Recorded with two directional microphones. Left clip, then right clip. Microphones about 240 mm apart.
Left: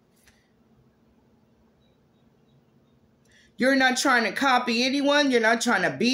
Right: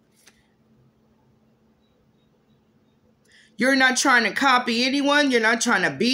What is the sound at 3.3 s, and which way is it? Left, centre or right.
Speech, centre.